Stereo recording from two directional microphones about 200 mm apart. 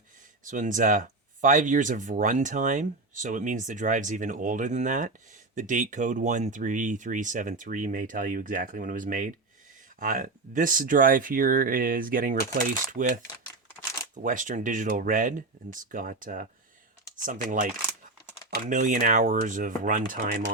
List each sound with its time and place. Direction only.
0.4 s speech: 40° right (ahead or behind)
14.2 s speech: 40° right (ahead or behind)